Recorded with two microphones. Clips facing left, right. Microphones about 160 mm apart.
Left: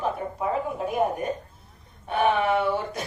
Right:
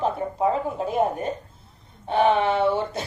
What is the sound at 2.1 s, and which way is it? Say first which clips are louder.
Speech: right 2 dB; 25° right (ahead or behind).